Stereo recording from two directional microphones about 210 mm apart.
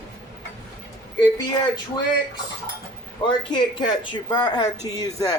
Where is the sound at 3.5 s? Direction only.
25° left (ahead or behind).